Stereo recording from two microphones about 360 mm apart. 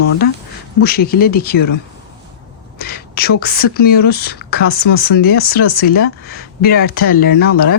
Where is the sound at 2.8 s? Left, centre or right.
Left.